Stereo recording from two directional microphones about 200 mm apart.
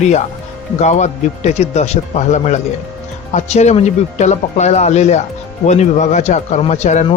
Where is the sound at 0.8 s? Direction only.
35° left (ahead or behind).